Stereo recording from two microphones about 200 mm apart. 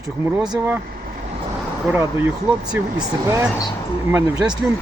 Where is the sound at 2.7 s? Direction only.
15° right (ahead or behind).